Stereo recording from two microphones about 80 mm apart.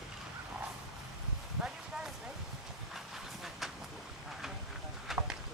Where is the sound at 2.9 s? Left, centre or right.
Centre.